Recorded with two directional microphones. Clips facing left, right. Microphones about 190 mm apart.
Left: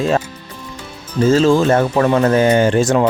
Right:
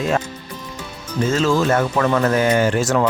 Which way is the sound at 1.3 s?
30° left (ahead or behind).